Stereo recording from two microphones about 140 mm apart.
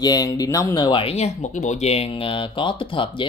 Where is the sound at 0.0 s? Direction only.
25° left (ahead or behind).